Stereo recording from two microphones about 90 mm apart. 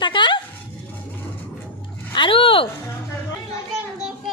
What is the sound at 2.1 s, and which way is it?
Speech, 70° left (ahead or behind).